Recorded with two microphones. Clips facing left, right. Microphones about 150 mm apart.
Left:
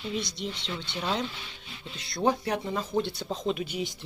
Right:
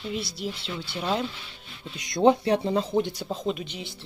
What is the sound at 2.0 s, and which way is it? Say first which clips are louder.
Speech: right 7 dB; 20° right (ahead or behind).